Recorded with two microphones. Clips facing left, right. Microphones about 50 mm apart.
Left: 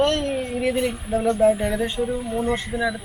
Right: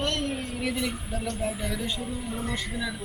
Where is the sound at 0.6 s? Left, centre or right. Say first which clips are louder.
Left 6 dB; left.